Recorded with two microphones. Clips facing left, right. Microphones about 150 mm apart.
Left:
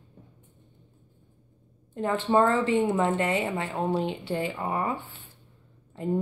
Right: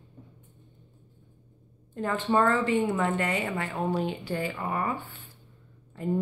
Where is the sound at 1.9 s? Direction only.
25° left (ahead or behind).